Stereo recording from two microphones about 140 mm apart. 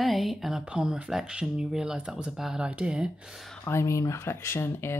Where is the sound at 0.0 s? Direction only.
Centre (ahead or behind).